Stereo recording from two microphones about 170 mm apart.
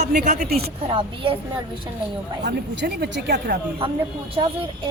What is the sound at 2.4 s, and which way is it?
A woman's voice, 80° right.